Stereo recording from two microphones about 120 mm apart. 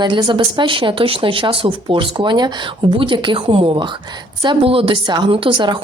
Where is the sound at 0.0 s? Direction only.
40° right (ahead or behind).